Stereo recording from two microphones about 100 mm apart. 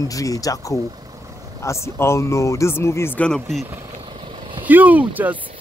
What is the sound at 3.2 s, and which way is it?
Speech, 5° left (ahead or behind).